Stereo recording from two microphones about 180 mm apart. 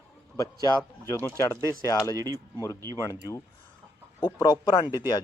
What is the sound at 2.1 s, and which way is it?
Speech, 20° right (ahead or behind).